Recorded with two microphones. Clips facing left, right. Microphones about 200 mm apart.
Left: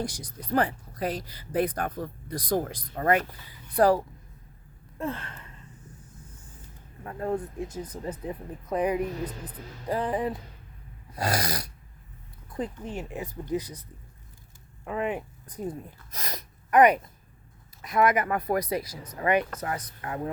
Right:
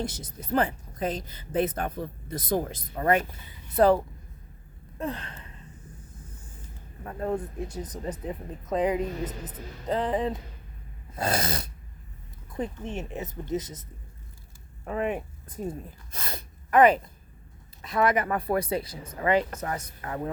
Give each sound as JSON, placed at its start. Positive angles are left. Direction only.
{"t": 0.0, "sound": "a woman's voice", "side_deg": -25}
{"t": 4.9, "sound": "a sound", "side_deg": -15}
{"t": 7.0, "sound": "a woman's voice", "side_deg": -30}
{"t": 11.1, "sound": "dog", "side_deg": -25}
{"t": 12.5, "sound": "a woman's voice", "side_deg": -25}
{"t": 15.1, "sound": "speech", "side_deg": -25}
{"t": 16.1, "sound": "a sound", "side_deg": -30}
{"t": 17.8, "sound": "a woman's voice", "side_deg": -30}